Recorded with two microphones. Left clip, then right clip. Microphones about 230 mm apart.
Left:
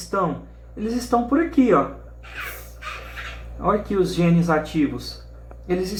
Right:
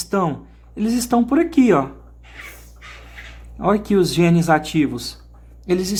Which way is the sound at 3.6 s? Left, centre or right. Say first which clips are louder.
Right 3 dB; right.